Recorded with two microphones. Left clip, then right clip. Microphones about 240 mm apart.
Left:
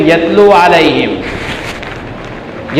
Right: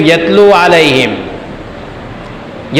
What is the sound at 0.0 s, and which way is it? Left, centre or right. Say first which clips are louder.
A man's voice: right 1 dB; right.